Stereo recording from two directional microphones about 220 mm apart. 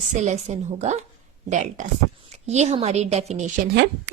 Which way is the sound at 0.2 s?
30° right (ahead or behind).